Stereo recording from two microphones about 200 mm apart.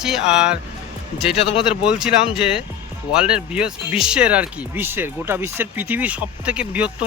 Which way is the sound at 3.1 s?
5° right (ahead or behind).